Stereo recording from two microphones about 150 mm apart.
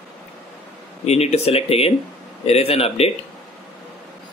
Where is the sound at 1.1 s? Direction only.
45° left (ahead or behind).